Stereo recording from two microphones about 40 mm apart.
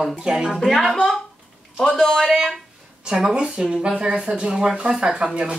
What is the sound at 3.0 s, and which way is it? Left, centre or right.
Speech, right.